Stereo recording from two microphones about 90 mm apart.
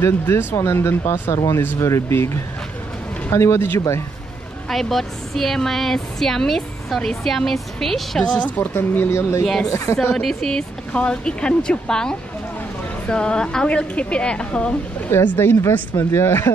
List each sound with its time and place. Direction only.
0.0 s speech: 25° left (ahead or behind)
1.3 s speech: 40° left (ahead or behind)
4.6 s a woman's voice: 5° left (ahead or behind)
8.5 s speech: 20° left (ahead or behind)
9.4 s speech: 10° left (ahead or behind)
9.7 s speech: 35° left (ahead or behind)
10.1 s speech: 5° left (ahead or behind)
15.0 s speech: 25° left (ahead or behind)